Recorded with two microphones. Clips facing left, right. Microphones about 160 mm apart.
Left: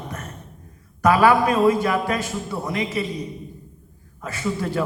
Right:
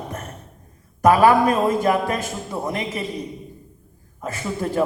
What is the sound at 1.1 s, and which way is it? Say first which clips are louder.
Speech: right 2 dB; 40° right (ahead or behind).